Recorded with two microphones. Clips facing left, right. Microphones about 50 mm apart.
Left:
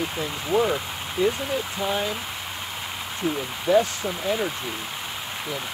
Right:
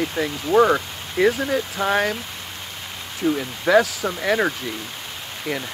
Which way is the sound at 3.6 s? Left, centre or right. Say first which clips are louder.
Right 3 dB; right.